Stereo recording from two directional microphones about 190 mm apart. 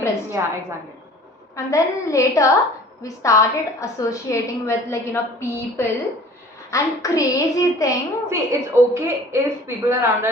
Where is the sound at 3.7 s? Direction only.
15° left (ahead or behind).